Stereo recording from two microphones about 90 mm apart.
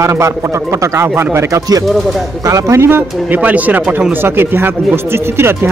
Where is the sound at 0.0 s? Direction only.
35° right (ahead or behind).